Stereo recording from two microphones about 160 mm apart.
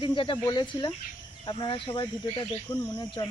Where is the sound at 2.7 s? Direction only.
15° left (ahead or behind).